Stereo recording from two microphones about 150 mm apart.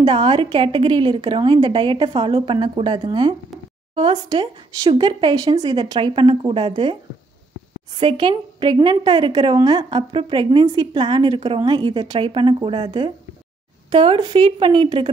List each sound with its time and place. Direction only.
0.0 s a woman's voice: 35° right (ahead or behind)
8.0 s a woman's voice: 35° right (ahead or behind)